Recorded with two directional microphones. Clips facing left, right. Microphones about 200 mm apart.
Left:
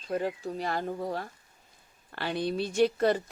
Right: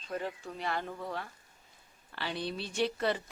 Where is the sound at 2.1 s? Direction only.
50° left (ahead or behind).